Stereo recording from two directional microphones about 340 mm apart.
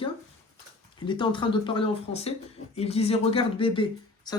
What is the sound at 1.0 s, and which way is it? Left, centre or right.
Speech, centre.